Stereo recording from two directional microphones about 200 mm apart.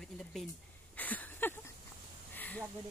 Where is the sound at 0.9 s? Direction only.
10° left (ahead or behind).